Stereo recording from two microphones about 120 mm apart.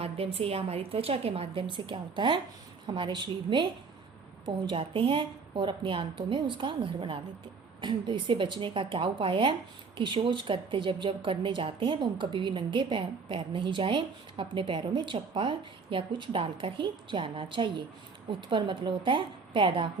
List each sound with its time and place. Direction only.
0.0 s a woman's voice: 55° right (ahead or behind)